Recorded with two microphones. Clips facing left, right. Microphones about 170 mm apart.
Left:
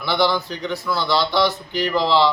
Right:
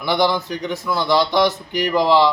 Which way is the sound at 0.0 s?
15° right (ahead or behind).